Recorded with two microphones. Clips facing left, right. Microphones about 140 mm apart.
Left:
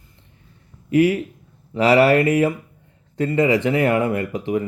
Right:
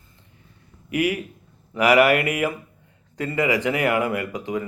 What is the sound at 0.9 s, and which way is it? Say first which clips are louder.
Speech: left 7 dB; 30° left (ahead or behind).